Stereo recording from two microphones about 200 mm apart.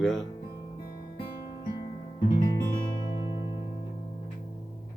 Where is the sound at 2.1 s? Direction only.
25° left (ahead or behind).